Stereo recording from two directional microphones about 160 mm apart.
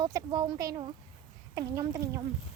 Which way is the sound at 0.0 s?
25° right (ahead or behind).